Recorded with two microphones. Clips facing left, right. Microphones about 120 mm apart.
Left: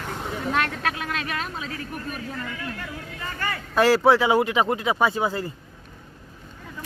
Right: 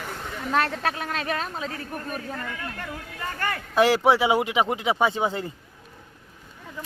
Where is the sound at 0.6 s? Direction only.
35° right (ahead or behind).